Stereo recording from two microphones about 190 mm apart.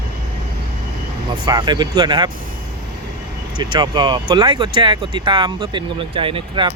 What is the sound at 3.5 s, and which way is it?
Speech, 25° right (ahead or behind).